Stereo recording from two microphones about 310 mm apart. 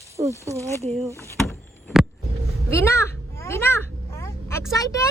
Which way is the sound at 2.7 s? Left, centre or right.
Centre.